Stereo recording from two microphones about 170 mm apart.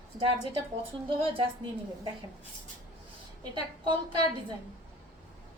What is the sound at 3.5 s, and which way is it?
A woman's voice, 25° right (ahead or behind).